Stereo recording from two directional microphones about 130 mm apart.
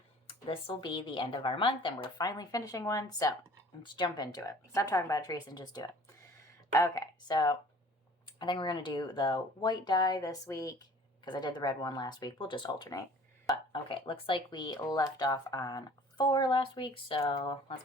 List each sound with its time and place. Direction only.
0.3 s speech: 40° left (ahead or behind)
13.8 s speech: 40° left (ahead or behind)